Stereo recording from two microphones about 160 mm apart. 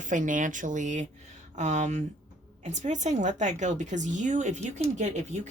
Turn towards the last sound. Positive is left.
turn(degrees=-50)  # may be behind; listen again after turning